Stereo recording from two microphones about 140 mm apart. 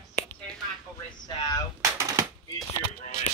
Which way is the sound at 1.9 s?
20° right (ahead or behind).